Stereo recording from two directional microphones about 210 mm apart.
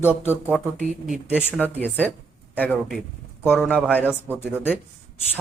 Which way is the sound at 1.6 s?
10° left (ahead or behind).